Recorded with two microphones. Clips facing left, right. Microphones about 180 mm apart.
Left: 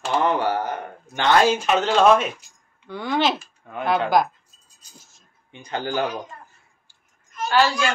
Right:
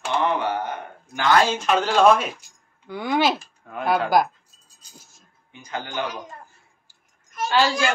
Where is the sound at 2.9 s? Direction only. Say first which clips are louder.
Right 1 dB; 10° right (ahead or behind).